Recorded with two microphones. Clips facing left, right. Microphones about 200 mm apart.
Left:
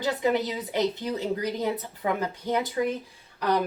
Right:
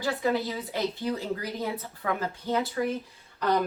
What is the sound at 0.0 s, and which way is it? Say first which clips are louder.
A woman's voice: left 2 dB; 20° left (ahead or behind).